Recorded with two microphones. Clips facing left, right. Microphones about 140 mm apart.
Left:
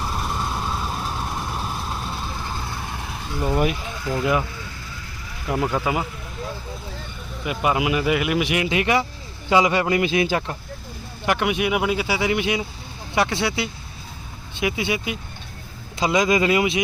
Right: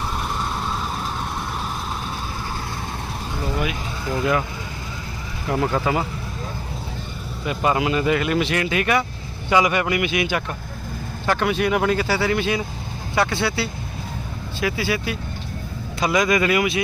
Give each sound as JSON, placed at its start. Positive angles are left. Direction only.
{"t": 0.2, "sound": "vehicle", "side_deg": 5}
{"t": 4.2, "sound": "speech", "side_deg": 20}
{"t": 5.5, "sound": "speech", "side_deg": 15}
{"t": 7.4, "sound": "speech", "side_deg": 10}
{"t": 11.3, "sound": "speech", "side_deg": 15}